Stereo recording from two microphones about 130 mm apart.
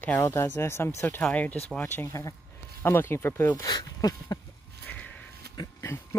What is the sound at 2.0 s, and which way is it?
Speech, 25° left (ahead or behind).